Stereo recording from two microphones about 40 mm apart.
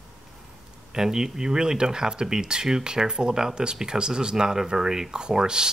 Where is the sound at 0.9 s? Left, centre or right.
Centre.